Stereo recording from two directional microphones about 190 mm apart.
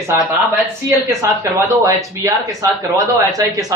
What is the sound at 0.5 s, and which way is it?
Speech, 15° right (ahead or behind).